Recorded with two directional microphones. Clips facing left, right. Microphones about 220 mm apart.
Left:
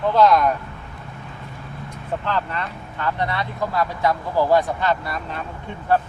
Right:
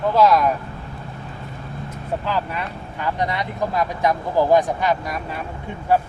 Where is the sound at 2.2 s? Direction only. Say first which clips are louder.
Left 1 dB; 10° right (ahead or behind).